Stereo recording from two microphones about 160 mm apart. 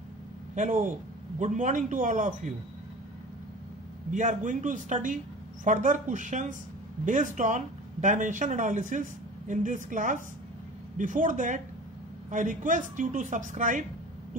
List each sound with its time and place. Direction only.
0.6 s speech: 50° right (ahead or behind)
4.1 s speech: 50° right (ahead or behind)